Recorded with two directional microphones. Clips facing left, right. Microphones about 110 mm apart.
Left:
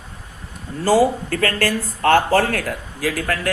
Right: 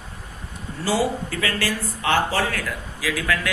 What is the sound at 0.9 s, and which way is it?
Speech, 45° left (ahead or behind).